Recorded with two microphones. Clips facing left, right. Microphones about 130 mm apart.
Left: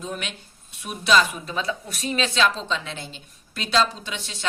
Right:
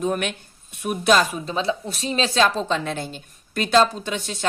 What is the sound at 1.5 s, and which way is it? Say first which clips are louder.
A woman's voice: right 4 dB; 30° right (ahead or behind).